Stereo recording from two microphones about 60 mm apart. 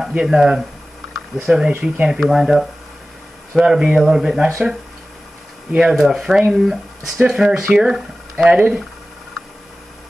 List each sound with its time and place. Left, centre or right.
0.1 s speech: centre
2.1 s speech: centre
5.8 s speech: centre